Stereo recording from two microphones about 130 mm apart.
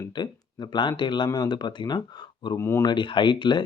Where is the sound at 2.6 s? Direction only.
20° left (ahead or behind).